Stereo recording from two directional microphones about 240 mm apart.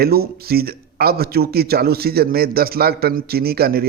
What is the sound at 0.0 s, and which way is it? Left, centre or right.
Speech, right.